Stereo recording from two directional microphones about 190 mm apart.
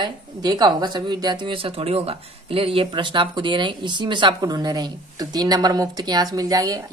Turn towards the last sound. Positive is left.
turn(degrees=-20)  # may be behind; listen again after turning